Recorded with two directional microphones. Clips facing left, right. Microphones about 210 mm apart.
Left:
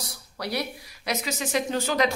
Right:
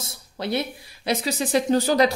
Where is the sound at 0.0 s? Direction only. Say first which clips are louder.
Right 4 dB; 25° right (ahead or behind).